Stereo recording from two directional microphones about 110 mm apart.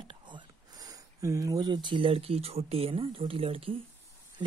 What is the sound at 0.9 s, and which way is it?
Speech, 30° right (ahead or behind).